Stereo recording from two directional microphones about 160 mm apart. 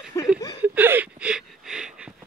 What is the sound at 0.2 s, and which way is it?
Chuckle, 20° left (ahead or behind).